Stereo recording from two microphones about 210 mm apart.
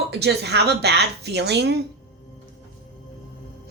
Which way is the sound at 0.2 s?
50° right (ahead or behind).